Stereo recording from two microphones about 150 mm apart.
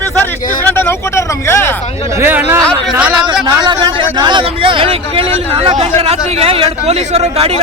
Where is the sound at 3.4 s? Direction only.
30° right (ahead or behind).